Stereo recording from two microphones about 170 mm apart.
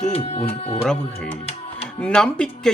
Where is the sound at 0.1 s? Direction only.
35° left (ahead or behind).